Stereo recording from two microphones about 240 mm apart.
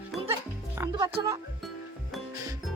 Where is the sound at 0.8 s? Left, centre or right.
Centre.